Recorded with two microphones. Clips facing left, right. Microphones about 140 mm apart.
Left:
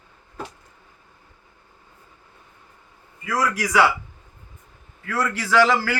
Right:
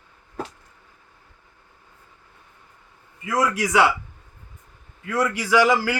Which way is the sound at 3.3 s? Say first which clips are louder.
Right 1 dB; 25° right (ahead or behind).